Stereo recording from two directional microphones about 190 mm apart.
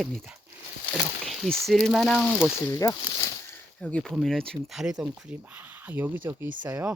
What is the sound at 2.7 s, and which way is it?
Speech, 20° left (ahead or behind).